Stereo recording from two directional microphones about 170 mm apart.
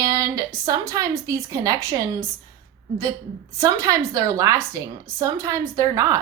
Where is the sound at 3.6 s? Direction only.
20° right (ahead or behind).